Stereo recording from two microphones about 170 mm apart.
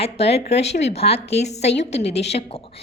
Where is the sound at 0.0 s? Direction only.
35° left (ahead or behind).